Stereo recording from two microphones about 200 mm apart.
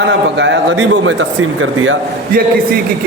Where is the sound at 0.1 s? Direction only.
65° right (ahead or behind).